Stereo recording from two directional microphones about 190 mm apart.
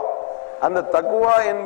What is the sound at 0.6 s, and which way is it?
Speech, 25° left (ahead or behind).